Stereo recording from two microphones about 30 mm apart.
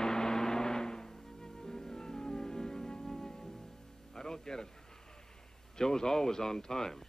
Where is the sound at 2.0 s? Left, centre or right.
Left.